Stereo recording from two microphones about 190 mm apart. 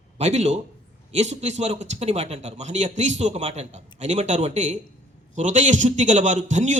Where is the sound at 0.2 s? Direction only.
35° right (ahead or behind).